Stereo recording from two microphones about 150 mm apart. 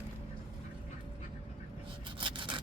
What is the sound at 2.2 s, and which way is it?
Sawing, 35° right (ahead or behind).